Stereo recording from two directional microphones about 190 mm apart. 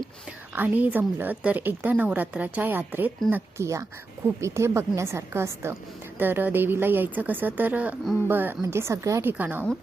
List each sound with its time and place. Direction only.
0.5 s a woman's voice: 10° right (ahead or behind)